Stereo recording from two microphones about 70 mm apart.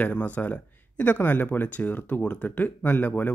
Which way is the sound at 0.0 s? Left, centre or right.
Left.